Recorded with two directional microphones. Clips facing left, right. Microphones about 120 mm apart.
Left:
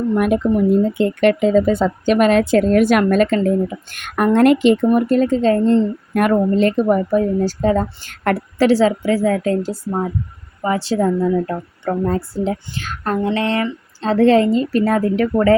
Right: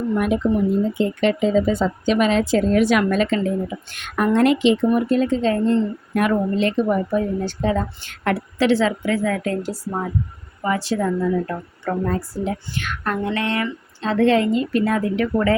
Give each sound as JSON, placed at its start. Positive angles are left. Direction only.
{"t": 0.1, "sound": "speech", "side_deg": 55}
{"t": 6.1, "sound": "a woman's voice", "side_deg": 50}